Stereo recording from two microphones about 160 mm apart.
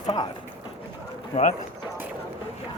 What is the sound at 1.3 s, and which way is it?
Speech, 40° left (ahead or behind).